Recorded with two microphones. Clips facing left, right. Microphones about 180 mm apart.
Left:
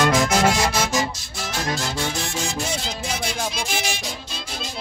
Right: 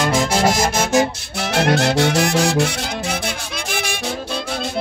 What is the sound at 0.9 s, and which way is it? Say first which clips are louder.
Music: right 8 dB; 70° right (ahead or behind).